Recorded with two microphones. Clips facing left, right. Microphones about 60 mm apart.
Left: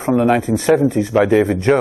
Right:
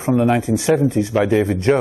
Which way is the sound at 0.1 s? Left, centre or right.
Centre.